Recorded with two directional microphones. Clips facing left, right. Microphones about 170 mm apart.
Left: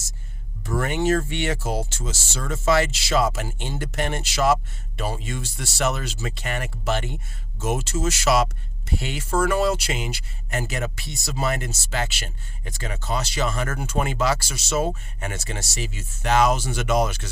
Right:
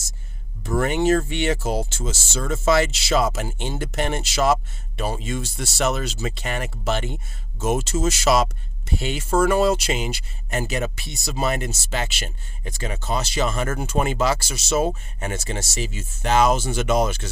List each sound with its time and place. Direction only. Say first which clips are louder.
0.7 s speech: right 3 dB; 20° right (ahead or behind)